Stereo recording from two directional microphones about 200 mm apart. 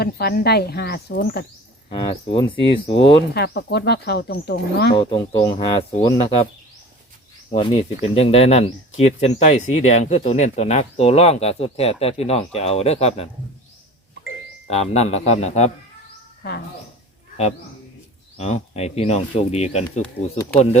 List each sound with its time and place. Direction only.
0.0 s speech: 50° left (ahead or behind)
1.9 s speech: 25° left (ahead or behind)
3.3 s speech: 55° left (ahead or behind)
5.4 s speech: 20° left (ahead or behind)
7.5 s speech: 30° left (ahead or behind)
14.7 s speech: 35° left (ahead or behind)
16.4 s speech: 50° left (ahead or behind)
18.3 s speech: 30° left (ahead or behind)